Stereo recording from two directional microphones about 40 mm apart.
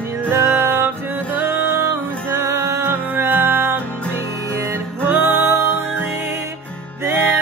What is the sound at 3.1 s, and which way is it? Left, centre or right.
Music, right.